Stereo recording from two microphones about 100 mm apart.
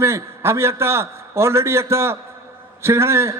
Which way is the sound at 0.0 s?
25° right (ahead or behind).